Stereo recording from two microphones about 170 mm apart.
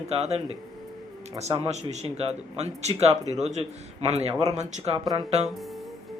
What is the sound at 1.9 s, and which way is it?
Speech, 40° right (ahead or behind).